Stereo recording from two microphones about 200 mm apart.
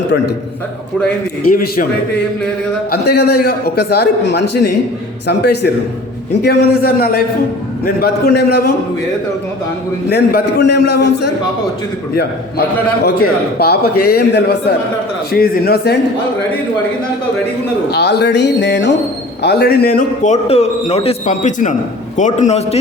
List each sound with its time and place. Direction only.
1.5 s a man's voice: 45° left (ahead or behind)
2.9 s a man's voice: 55° left (ahead or behind)
10.1 s a man's voice: 55° left (ahead or behind)
17.9 s a man's voice: 55° left (ahead or behind)
20.2 s a man's voice: 35° left (ahead or behind)